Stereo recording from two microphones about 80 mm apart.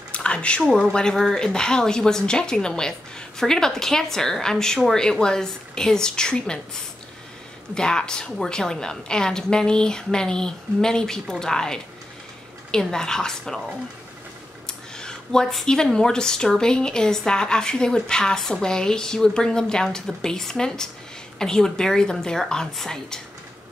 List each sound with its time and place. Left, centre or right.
0.1 s a sound: centre
0.8 s speech: centre
14.7 s speech: centre